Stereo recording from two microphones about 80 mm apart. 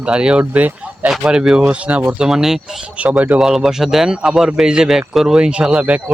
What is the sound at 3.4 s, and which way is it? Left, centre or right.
A man's voice, centre.